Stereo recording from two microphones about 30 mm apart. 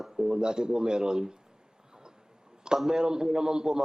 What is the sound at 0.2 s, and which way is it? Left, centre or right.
A woman's voice, right.